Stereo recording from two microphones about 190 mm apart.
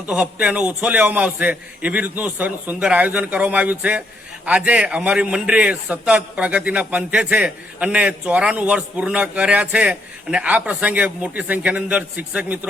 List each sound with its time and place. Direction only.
0.0 s a man's voice: 5° right (ahead or behind)